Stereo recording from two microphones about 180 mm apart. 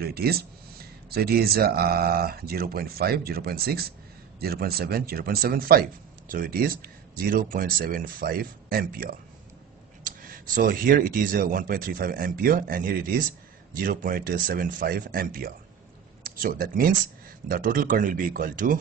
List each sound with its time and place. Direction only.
0.0 s a man's voice: 60° right (ahead or behind)